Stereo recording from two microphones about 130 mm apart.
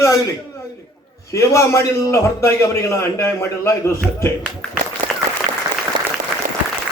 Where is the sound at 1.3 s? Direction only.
25° left (ahead or behind).